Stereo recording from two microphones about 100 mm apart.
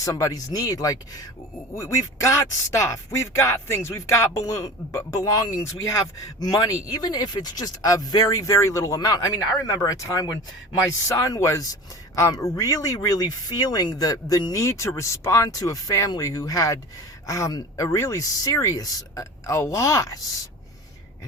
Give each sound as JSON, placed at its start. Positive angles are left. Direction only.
{"t": 0.0, "sound": "speech", "side_deg": 35}